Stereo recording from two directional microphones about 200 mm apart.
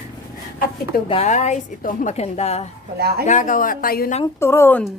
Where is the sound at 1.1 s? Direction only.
30° left (ahead or behind).